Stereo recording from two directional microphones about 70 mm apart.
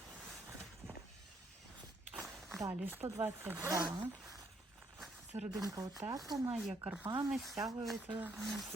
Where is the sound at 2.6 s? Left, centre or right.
Right.